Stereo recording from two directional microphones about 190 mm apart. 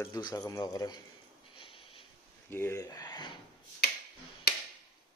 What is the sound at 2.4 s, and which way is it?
Speech, 10° left (ahead or behind).